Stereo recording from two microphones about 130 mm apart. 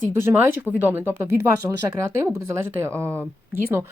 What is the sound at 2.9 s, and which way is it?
Speech, 10° left (ahead or behind).